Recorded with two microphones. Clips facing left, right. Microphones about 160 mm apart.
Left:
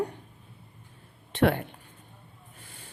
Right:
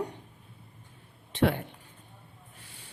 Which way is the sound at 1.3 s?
60° left (ahead or behind).